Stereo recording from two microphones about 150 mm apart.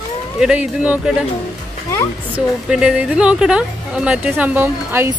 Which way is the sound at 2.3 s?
5° right (ahead or behind).